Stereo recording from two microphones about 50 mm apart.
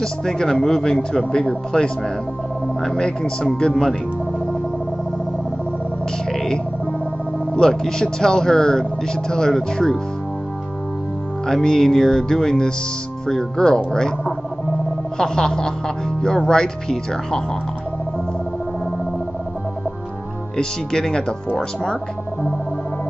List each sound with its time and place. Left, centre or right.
0.0 s speech: centre
6.3 s music: centre
7.5 s speech: centre
11.4 s speech: centre
20.5 s speech: centre